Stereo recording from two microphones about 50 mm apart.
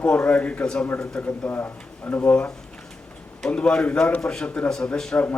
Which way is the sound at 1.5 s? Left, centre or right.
Left.